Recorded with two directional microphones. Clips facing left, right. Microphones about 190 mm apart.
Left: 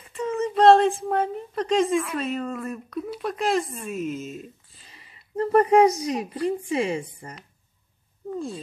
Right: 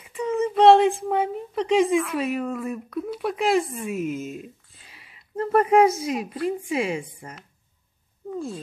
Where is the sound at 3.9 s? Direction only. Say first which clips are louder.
Right 1 dB; 60° right (ahead or behind).